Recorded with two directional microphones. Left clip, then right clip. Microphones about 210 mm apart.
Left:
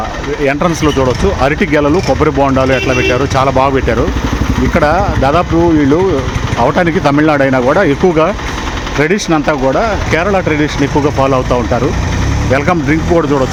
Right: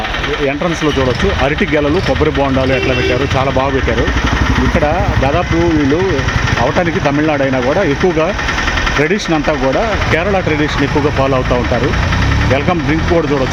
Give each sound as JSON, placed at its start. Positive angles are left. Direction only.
{"t": 1.5, "sound": "speech", "side_deg": 15}
{"t": 4.8, "sound": "speech", "side_deg": 25}
{"t": 6.7, "sound": "speech", "side_deg": 25}